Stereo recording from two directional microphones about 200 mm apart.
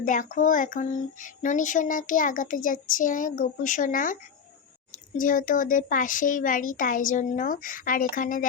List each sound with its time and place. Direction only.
0.0 s a child's voice: 40° left (ahead or behind)